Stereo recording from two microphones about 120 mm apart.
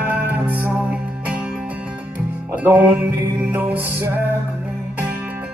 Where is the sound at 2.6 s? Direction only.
10° right (ahead or behind).